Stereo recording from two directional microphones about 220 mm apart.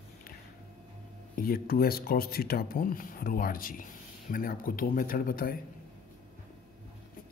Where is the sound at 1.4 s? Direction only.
40° left (ahead or behind).